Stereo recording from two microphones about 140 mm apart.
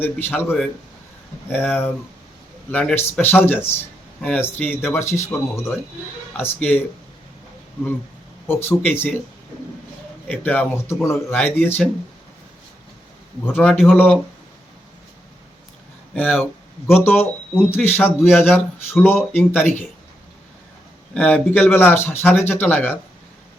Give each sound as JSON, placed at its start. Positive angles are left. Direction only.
{"t": 0.0, "sound": "speech", "side_deg": 15}
{"t": 8.8, "sound": "speech", "side_deg": 10}
{"t": 10.2, "sound": "speech", "side_deg": 10}
{"t": 13.4, "sound": "speech", "side_deg": 15}
{"t": 16.1, "sound": "speech", "side_deg": 15}
{"t": 21.1, "sound": "speech", "side_deg": 10}